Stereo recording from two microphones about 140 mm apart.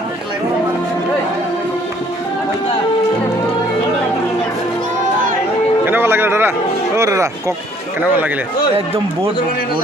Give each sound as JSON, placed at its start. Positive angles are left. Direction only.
{"t": 5.8, "sound": "music", "side_deg": -15}
{"t": 6.9, "sound": "speech", "side_deg": -20}